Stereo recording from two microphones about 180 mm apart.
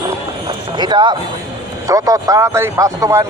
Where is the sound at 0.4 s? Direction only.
25° right (ahead or behind).